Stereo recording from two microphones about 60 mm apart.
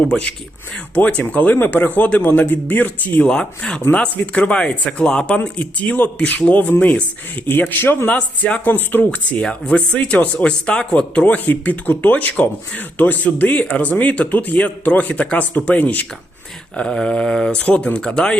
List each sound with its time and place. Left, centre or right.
0.0 s speech: centre
3.2 s speech: centre
3.8 s speech: left
5.4 s speech: left
8.0 s speech: left
8.6 s speech: left
9.4 s speech: centre
16.7 s speech: centre